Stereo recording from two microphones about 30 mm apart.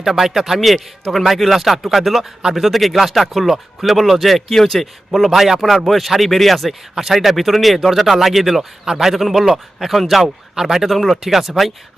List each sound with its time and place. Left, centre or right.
0.0 s a man's voice: centre
0.6 s speech: centre
4.4 s speech: centre
10.2 s a man's voice: centre
10.7 s speech: centre
10.9 s speech: centre
11.2 s a man's voice: centre